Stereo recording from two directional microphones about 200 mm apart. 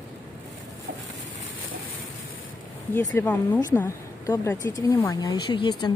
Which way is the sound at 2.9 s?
10° left (ahead or behind).